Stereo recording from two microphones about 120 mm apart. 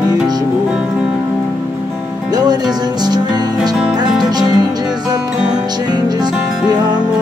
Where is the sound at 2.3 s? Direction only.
35° right (ahead or behind).